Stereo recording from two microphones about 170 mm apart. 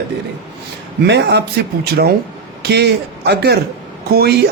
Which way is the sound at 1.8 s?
70° right (ahead or behind).